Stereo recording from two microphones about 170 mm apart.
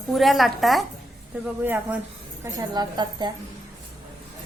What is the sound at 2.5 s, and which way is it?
Speech, 25° right (ahead or behind).